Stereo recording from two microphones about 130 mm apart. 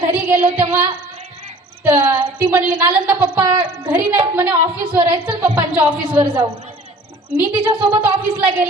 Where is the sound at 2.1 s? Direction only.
30° right (ahead or behind).